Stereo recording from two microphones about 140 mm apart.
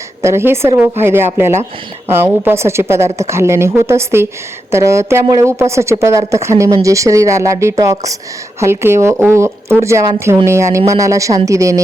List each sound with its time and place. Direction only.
0.2 s speech: 20° right (ahead or behind)